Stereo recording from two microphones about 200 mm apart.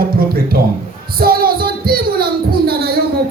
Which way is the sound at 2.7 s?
50° right (ahead or behind).